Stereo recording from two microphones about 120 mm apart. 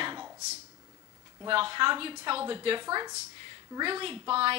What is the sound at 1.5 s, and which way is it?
A woman's voice, 45° right (ahead or behind).